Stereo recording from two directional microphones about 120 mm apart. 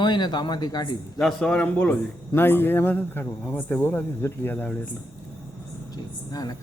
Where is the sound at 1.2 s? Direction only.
5° left (ahead or behind).